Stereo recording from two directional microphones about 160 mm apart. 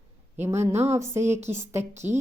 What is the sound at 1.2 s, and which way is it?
Speech, 45° right (ahead or behind).